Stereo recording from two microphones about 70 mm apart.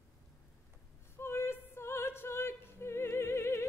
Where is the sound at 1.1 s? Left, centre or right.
Left.